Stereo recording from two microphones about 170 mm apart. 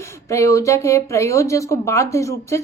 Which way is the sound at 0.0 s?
20° left (ahead or behind).